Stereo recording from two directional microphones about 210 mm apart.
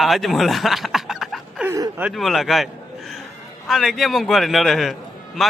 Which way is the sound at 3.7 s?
Centre (ahead or behind).